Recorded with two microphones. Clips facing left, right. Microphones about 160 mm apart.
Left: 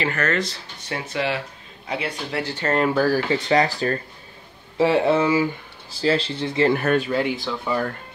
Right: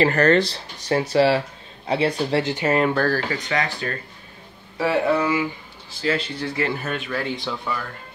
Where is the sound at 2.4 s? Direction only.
15° right (ahead or behind).